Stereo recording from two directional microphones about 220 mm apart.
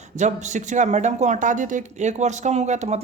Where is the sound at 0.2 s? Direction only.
35° right (ahead or behind).